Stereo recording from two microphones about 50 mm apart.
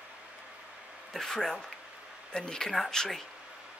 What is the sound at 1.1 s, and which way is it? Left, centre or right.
Speech, centre.